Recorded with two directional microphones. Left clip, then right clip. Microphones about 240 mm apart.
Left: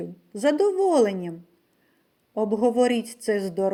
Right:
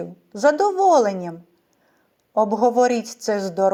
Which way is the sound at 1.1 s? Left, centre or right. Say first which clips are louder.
Right 5 dB; right.